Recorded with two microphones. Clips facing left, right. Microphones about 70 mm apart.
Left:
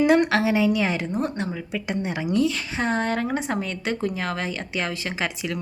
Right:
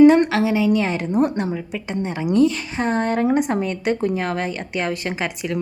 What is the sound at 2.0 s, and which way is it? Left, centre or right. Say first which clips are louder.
Speech: right 5 dB; centre.